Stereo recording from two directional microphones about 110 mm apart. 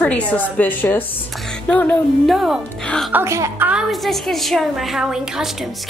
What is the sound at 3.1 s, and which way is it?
Speech, 25° right (ahead or behind).